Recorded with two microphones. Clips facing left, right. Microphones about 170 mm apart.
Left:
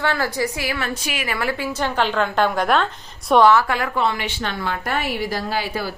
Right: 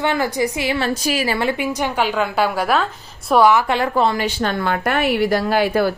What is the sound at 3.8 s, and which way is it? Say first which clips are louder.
Speech: right 4 dB; 35° right (ahead or behind).